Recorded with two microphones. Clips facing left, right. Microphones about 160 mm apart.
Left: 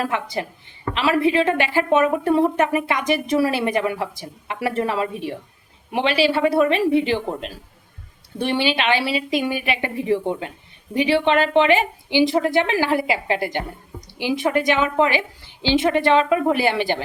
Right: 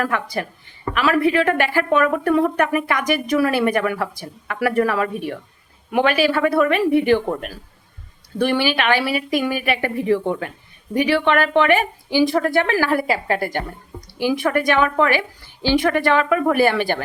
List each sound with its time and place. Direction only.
0.0 s speech: 20° left (ahead or behind)
6.3 s a woman's voice: 50° right (ahead or behind)
6.6 s speech: 25° left (ahead or behind)